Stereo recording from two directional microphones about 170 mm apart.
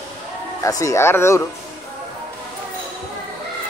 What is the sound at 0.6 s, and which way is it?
Speech, 20° left (ahead or behind).